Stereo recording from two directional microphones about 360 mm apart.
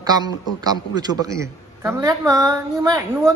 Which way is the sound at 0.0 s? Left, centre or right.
Centre.